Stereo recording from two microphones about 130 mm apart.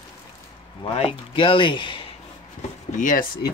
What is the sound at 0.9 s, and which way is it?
Speech, 45° left (ahead or behind).